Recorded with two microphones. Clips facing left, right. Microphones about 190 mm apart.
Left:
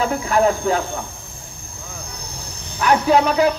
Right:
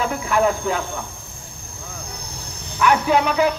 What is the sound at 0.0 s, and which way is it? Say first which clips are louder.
Speech: left 2 dB; 35° left (ahead or behind).